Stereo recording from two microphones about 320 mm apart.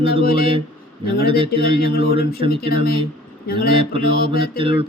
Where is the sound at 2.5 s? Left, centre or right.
Left.